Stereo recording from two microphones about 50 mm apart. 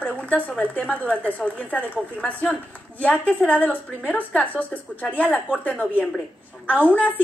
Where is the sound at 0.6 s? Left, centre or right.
Left.